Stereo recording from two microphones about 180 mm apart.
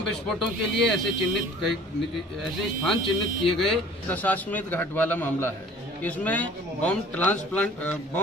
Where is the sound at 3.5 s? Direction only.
5° left (ahead or behind).